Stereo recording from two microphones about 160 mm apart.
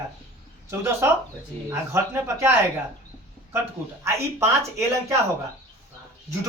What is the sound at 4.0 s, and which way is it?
Speech, 15° right (ahead or behind).